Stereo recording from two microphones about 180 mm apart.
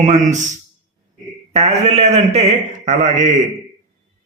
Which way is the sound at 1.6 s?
35° right (ahead or behind).